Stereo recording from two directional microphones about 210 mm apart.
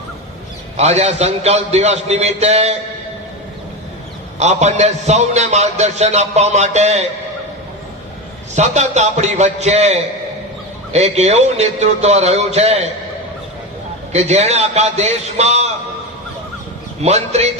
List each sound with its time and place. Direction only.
0.8 s a man's voice: 30° right (ahead or behind)
4.4 s a man's voice: 30° right (ahead or behind)
8.5 s a man's voice: 35° right (ahead or behind)
14.1 s a man's voice: 30° right (ahead or behind)
17.0 s a man's voice: 30° right (ahead or behind)